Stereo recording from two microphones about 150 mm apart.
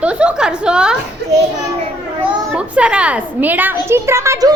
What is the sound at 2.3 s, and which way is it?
A child's voice, 10° right (ahead or behind).